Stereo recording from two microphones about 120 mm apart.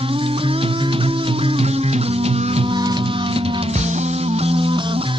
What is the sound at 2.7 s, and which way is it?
Music, 40° right (ahead or behind).